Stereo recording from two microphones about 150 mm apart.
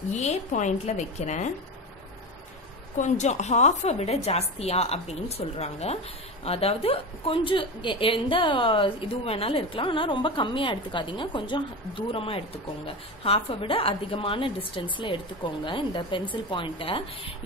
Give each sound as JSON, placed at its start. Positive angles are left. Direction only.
{"t": 0.1, "sound": "a woman's voice", "side_deg": 50}
{"t": 3.0, "sound": "a woman's voice", "side_deg": 50}